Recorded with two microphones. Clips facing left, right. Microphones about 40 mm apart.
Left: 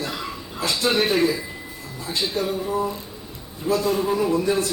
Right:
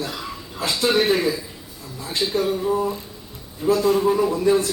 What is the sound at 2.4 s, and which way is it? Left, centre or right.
Speech, centre.